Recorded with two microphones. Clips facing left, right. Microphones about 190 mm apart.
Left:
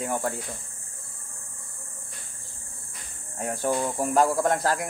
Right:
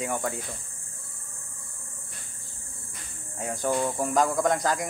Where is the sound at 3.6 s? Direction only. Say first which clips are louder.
Even; 10° left (ahead or behind).